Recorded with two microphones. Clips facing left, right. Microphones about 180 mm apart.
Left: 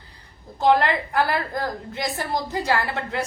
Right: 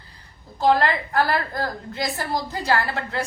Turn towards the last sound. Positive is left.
turn(degrees=20)  # may be behind; listen again after turning